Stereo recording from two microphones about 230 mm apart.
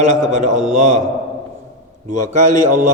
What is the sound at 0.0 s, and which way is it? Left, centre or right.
A man's voice, right.